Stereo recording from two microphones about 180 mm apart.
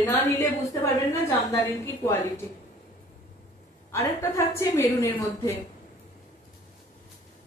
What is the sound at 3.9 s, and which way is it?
A woman's voice, 15° left (ahead or behind).